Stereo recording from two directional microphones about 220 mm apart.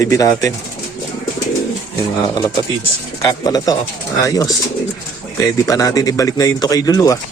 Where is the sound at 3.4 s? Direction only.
15° left (ahead or behind).